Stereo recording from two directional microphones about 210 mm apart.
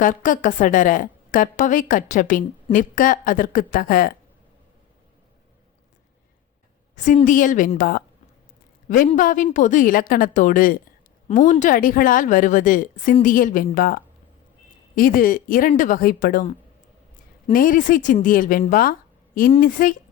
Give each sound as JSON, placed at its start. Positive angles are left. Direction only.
{"t": 0.0, "sound": "a woman's voice", "side_deg": 40}
{"t": 6.9, "sound": "a woman's voice", "side_deg": 35}